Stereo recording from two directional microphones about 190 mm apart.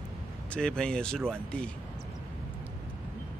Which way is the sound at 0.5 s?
5° left (ahead or behind).